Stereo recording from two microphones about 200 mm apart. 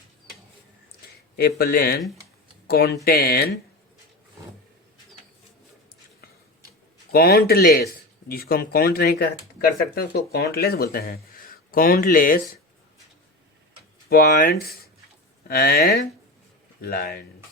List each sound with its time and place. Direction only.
1.4 s speech: 50° left (ahead or behind)
7.1 s speech: 50° left (ahead or behind)
14.1 s speech: 45° left (ahead or behind)